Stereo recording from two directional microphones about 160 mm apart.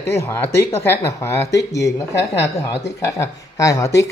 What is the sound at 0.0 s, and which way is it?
A man's voice, 15° left (ahead or behind).